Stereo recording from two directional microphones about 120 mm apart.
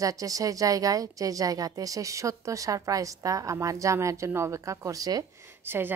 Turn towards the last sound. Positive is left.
turn(degrees=-20)  # may be behind; listen again after turning